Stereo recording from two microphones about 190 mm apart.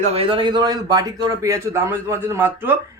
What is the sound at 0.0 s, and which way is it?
A man's voice, 30° right (ahead or behind).